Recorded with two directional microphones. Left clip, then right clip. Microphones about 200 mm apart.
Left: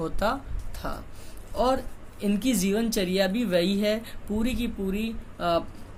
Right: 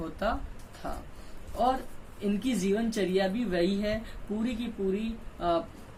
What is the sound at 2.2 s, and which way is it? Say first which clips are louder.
Speech: left 3 dB; 55° left (ahead or behind).